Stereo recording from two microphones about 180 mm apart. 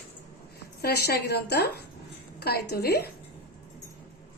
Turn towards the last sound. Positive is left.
turn(degrees=65)  # may be behind; listen again after turning